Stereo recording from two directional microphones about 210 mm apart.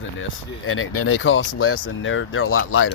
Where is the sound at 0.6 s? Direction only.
85° left.